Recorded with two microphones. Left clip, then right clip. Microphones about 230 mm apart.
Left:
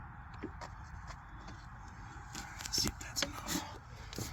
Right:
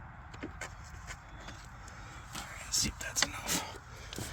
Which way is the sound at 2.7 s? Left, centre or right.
Right.